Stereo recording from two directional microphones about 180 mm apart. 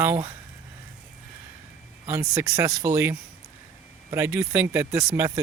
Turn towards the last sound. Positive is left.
turn(degrees=-15)  # may be behind; listen again after turning